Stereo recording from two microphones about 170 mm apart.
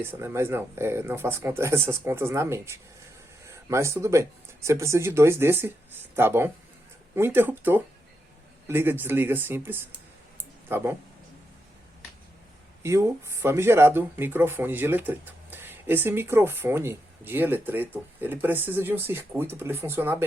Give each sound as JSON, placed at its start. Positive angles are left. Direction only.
{"t": 0.0, "sound": "speech", "side_deg": -15}
{"t": 12.8, "sound": "speech", "side_deg": -15}